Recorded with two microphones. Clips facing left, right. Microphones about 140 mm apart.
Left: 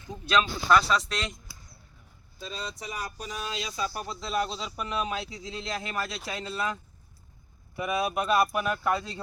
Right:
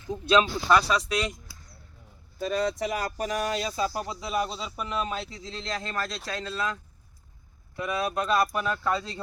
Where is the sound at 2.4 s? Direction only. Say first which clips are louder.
Right 11 dB; 70° right (ahead or behind).